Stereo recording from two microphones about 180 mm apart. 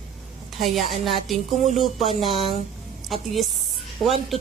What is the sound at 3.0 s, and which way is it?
Music, centre (ahead or behind).